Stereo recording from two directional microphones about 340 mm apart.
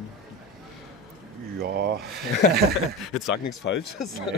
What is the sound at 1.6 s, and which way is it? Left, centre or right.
Speech, right.